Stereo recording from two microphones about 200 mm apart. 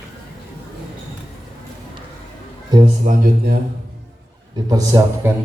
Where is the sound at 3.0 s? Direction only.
45° right (ahead or behind).